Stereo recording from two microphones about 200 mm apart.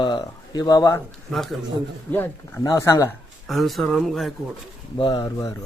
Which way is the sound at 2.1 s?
15° left (ahead or behind).